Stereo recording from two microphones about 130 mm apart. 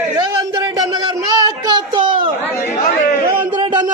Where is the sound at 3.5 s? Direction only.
35° right (ahead or behind).